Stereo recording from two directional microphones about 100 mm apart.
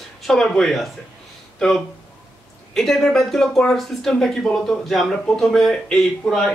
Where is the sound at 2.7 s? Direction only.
Centre (ahead or behind).